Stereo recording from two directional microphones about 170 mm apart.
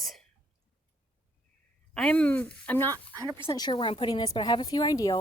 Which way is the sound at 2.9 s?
20° right (ahead or behind).